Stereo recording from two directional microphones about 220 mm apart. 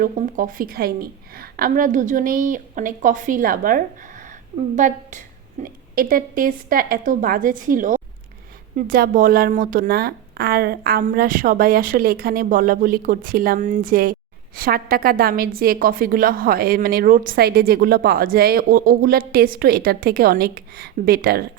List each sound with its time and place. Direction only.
0.0 s a woman's voice: 40° right (ahead or behind)